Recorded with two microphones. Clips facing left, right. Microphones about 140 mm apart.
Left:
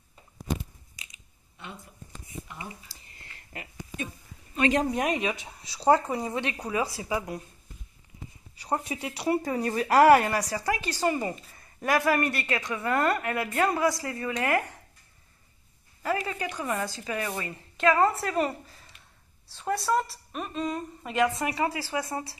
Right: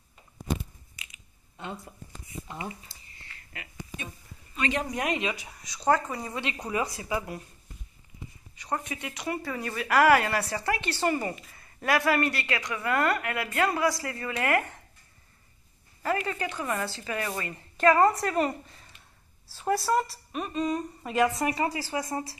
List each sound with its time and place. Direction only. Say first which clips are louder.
4.6 s a woman's voice: left 5 dB; 45° left (ahead or behind)
4.9 s speech: left 2 dB; 15° left (ahead or behind)
6.5 s a woman's voice: left 1 dB; 5° left (ahead or behind)
7.0 s a woman's voice: left 1 dB; 15° left (ahead or behind)
8.7 s speech: left 2 dB; 35° left (ahead or behind)
10.5 s a woman's voice: left 1 dB; 10° left (ahead or behind)
16.0 s a woman's voice: even; 10° left (ahead or behind)
17.7 s a woman's voice: right 2 dB; centre (ahead or behind)
19.5 s a woman's voice: right 1 dB; 5° right (ahead or behind)